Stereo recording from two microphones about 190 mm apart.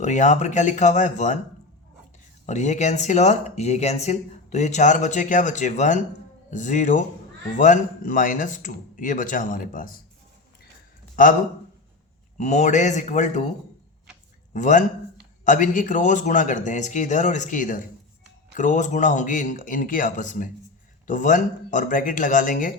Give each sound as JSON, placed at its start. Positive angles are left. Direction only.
{"t": 0.0, "sound": "speech", "side_deg": 40}
{"t": 2.5, "sound": "speech", "side_deg": 40}
{"t": 12.4, "sound": "speech", "side_deg": 40}
{"t": 14.5, "sound": "speech", "side_deg": 40}